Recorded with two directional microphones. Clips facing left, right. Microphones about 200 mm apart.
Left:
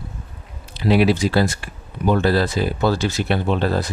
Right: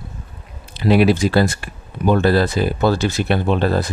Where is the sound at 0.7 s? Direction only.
50° right (ahead or behind).